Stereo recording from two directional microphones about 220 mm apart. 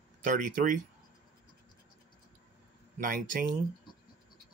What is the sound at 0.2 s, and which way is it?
Speech, 35° right (ahead or behind).